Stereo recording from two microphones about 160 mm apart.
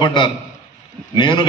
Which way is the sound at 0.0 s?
30° left (ahead or behind).